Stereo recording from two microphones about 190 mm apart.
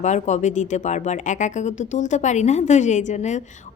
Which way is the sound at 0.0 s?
40° left (ahead or behind).